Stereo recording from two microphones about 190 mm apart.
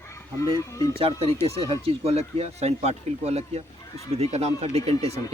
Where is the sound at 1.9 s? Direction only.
30° right (ahead or behind).